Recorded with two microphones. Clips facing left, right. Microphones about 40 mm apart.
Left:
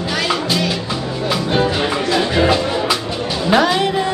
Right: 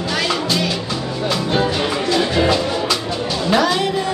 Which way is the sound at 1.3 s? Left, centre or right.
Centre.